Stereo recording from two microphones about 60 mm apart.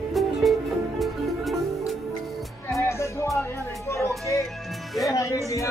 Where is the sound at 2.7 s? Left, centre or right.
Left.